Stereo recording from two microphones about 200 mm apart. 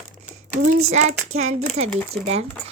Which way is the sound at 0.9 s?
35° right (ahead or behind).